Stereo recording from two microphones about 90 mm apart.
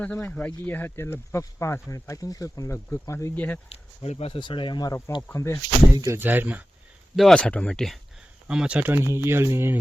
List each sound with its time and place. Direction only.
0.0 s speech: 15° left (ahead or behind); by 3.3 s 35° left (ahead or behind)
3.3 s speech: 15° left (ahead or behind)
4.2 s speech: 65° left (ahead or behind)
5.3 s speech: 30° left (ahead or behind)
5.9 s speech: 35° right (ahead or behind)
6.1 s speech: 20° right (ahead or behind)
7.2 s speech: 5° left (ahead or behind)
8.4 s speech: 10° right (ahead or behind); by 9.7 s 30° right (ahead or behind)